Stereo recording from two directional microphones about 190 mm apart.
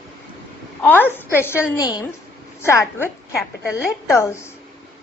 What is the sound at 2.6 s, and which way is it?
A woman's voice, 15° left (ahead or behind).